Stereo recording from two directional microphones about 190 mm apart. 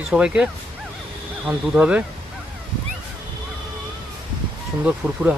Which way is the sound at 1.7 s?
5° right (ahead or behind).